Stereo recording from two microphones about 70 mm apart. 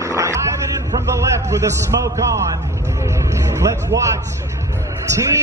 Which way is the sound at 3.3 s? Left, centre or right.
Right.